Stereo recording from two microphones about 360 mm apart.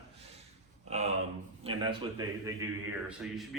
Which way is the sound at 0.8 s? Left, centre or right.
Centre.